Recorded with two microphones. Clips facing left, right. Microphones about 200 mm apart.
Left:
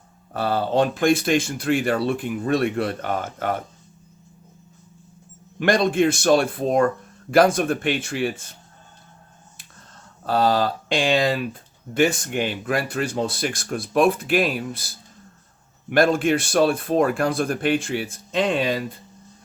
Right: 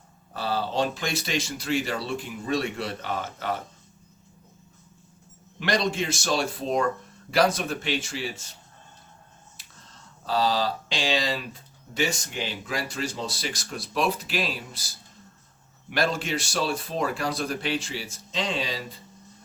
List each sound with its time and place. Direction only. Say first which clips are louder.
0.3 s speech: left 6 dB; 55° left (ahead or behind)
5.5 s speech: left 7 dB; 50° left (ahead or behind)
9.6 s speech: left 3 dB; 55° left (ahead or behind)